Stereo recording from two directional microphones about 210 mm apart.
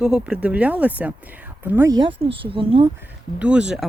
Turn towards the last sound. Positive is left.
turn(degrees=-5)  # may be behind; listen again after turning